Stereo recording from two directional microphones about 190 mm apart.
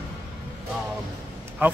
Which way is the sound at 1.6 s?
10° right (ahead or behind).